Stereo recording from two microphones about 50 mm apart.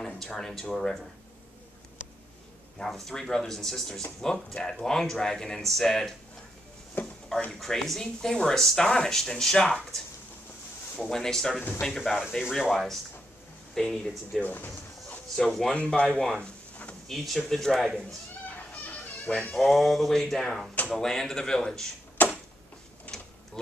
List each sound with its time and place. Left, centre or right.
0.0 s speech: centre
2.8 s speech: centre
7.0 s speech: left
7.5 s speech: centre
11.0 s speech: centre
12.7 s speech: centre
14.4 s music: left
15.3 s speech: centre
16.4 s a sound: left
17.1 s speech: centre
19.3 s speech: centre
22.2 s a sound: left